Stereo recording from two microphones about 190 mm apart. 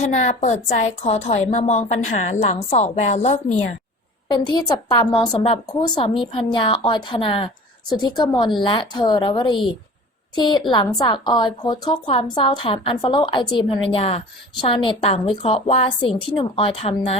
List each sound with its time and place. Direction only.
0.0 s a woman's voice: 40° left (ahead or behind)
4.3 s a woman's voice: 25° left (ahead or behind)